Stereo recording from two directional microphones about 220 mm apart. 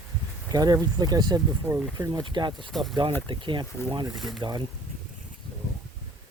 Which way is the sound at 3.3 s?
20° right (ahead or behind).